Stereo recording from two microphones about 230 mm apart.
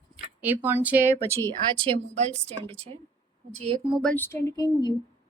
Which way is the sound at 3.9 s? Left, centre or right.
Centre.